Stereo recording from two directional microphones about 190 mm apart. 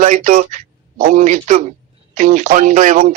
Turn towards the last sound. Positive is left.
turn(degrees=-40)  # may be behind; listen again after turning